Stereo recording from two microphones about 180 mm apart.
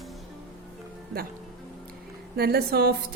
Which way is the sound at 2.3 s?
60° right (ahead or behind).